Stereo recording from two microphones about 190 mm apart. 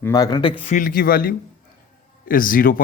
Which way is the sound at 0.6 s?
40° left (ahead or behind).